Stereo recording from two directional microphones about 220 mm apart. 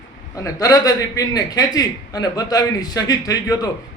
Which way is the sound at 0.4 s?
15° left (ahead or behind).